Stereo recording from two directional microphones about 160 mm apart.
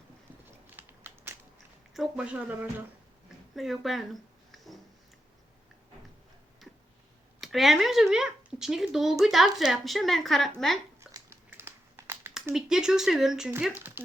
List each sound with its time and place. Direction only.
0.8 s a sound: 10° right (ahead or behind)
1.9 s speech: 5° right (ahead or behind)
3.5 s speech: centre (ahead or behind)
7.4 s speech: centre (ahead or behind)
11.1 s a sound: 15° right (ahead or behind)
12.5 s speech: 5° right (ahead or behind)